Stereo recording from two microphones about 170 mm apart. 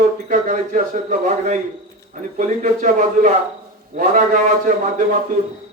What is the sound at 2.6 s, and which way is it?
Speech, 45° right (ahead or behind).